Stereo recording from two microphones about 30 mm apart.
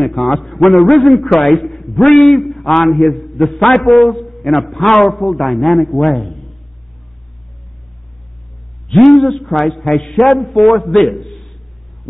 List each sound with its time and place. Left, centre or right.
0.0 s a man's voice: centre
2.3 s a sound: centre
2.7 s a man's voice: centre
3.3 s a man's voice: centre
4.1 s a man's voice: centre
9.0 s a man's voice: centre
10.4 s a man's voice: centre